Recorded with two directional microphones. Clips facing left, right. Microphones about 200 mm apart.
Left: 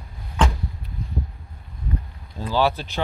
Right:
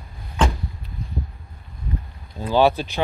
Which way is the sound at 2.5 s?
20° right (ahead or behind).